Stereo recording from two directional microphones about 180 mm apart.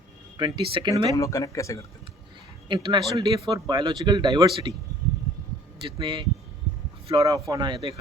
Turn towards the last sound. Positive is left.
turn(degrees=-25)  # may be behind; listen again after turning